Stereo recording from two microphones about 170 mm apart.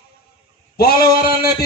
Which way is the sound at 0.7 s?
65° left (ahead or behind).